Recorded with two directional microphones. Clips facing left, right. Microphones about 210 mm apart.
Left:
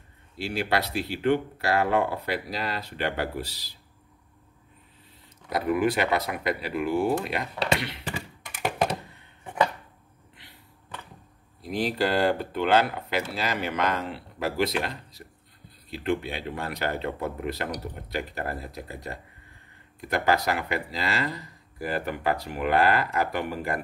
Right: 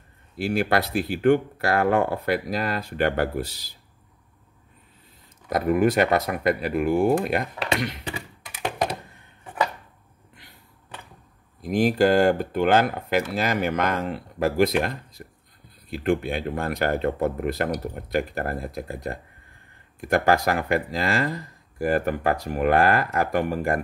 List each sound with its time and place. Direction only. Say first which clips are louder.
0.4 s speech: right 5 dB; 50° right (ahead or behind)
5.5 s speech: right 4 dB; 45° right (ahead or behind)
8.5 s thunk: even; centre (ahead or behind)
11.6 s speech: right 7 dB; 45° right (ahead or behind)